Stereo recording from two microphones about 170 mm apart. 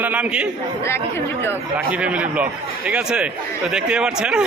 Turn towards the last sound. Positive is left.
turn(degrees=-5)  # may be behind; listen again after turning